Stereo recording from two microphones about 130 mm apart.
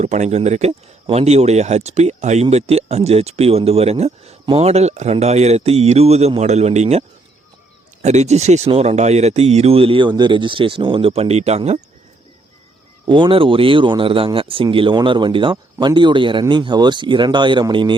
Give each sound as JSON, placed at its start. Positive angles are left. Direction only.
{"t": 0.0, "sound": "a man's voice", "side_deg": -60}
{"t": 8.0, "sound": "speech", "side_deg": -60}
{"t": 13.1, "sound": "speech", "side_deg": -40}